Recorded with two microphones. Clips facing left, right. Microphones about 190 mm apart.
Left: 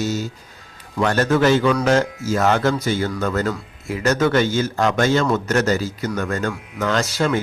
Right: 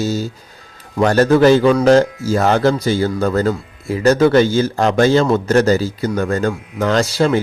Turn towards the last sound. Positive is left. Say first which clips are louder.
# right 5 dB
turn(degrees=-30)  # may be behind; listen again after turning